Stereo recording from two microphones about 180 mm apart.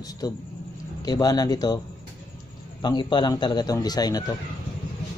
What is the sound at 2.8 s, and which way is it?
Speech, 25° left (ahead or behind).